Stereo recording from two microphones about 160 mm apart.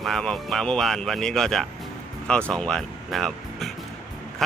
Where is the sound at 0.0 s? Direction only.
Centre (ahead or behind).